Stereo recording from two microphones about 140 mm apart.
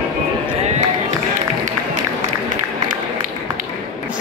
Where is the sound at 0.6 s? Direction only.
55° right (ahead or behind).